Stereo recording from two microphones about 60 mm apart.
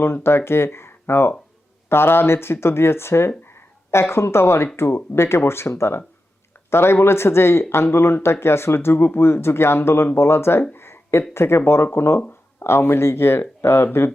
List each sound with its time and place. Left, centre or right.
0.0 s speech: left